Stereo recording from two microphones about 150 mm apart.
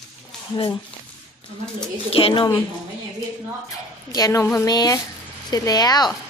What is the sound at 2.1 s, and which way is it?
Speech, 40° left (ahead or behind).